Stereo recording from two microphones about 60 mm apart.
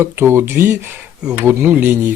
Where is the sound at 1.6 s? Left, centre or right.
Right.